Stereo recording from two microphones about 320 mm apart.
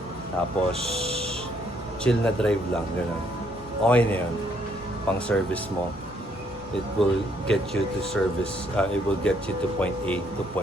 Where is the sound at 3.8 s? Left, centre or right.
Centre.